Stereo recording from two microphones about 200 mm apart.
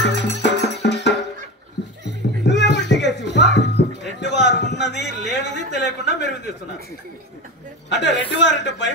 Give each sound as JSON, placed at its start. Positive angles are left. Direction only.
{"t": 0.0, "sound": "music", "side_deg": 55}
{"t": 4.2, "sound": "a sound", "side_deg": 60}
{"t": 7.9, "sound": "a woman's voice", "side_deg": 60}